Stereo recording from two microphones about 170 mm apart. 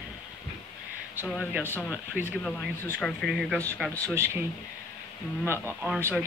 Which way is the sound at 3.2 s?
Centre (ahead or behind).